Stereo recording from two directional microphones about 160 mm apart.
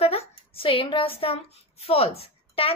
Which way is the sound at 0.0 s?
40° left (ahead or behind).